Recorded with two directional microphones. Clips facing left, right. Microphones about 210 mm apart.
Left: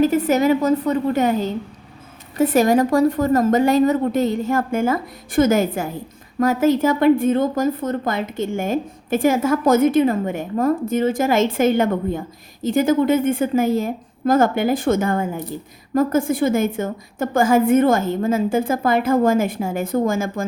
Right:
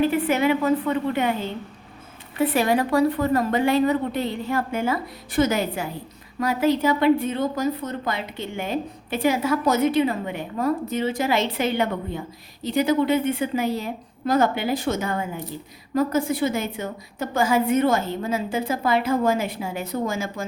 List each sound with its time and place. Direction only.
0.0 s a woman's voice: 40° left (ahead or behind)